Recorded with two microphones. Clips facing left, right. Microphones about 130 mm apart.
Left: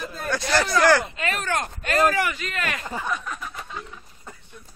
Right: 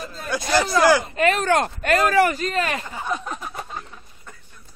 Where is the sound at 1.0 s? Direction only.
40° right (ahead or behind).